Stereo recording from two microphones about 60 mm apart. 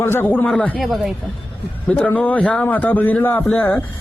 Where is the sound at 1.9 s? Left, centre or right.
Left.